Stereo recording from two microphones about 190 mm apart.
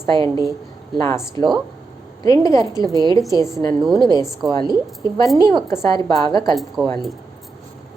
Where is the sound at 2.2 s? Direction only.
20° left (ahead or behind).